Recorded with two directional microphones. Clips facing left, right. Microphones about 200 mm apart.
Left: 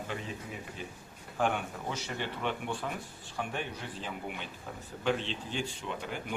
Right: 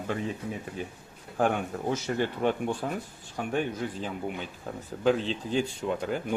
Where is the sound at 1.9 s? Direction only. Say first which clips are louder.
Right 9 dB; 45° right (ahead or behind).